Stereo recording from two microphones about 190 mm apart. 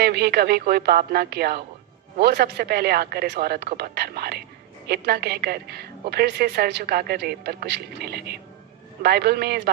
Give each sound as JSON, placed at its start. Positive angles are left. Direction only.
{"t": 0.0, "sound": "a woman's voice", "side_deg": -55}